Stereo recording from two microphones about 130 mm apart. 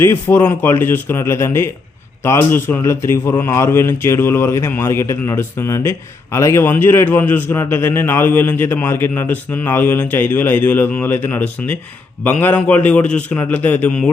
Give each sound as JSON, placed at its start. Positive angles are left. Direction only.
{"t": 0.0, "sound": "a man's voice", "side_deg": 15}